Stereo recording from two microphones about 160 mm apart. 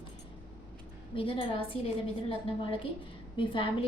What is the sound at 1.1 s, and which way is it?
Speech, 35° left (ahead or behind).